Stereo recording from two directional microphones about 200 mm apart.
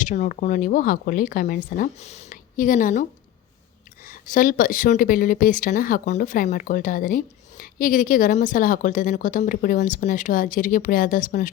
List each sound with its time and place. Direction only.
0.0 s speech: 40° left (ahead or behind)